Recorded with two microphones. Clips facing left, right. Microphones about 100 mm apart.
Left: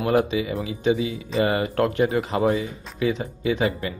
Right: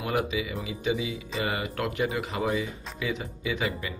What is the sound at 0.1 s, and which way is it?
Speech, 35° left (ahead or behind).